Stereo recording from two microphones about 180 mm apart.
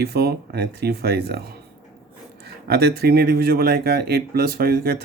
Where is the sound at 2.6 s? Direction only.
60° right (ahead or behind).